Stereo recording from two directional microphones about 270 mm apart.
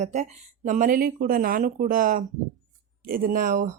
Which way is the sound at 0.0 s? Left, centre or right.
Right.